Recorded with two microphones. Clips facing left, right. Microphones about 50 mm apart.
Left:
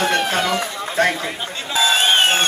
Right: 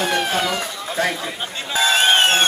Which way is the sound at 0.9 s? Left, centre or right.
Left.